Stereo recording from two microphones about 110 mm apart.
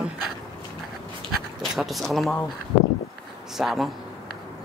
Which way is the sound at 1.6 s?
Centre (ahead or behind).